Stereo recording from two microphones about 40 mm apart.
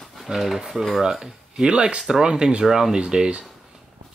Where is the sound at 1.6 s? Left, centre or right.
Right.